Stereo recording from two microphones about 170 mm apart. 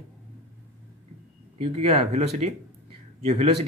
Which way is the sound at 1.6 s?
40° right (ahead or behind).